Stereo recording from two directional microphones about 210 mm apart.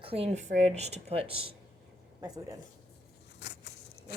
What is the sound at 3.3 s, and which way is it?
Vehicle, 55° left (ahead or behind).